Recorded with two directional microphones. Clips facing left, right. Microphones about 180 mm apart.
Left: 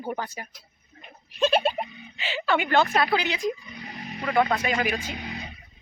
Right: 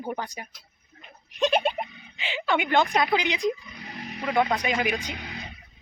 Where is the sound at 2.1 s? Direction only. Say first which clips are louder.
Left 1 dB; 15° right (ahead or behind).